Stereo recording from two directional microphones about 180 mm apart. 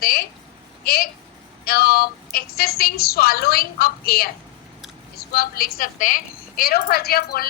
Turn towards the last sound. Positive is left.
turn(degrees=55)  # may be behind; listen again after turning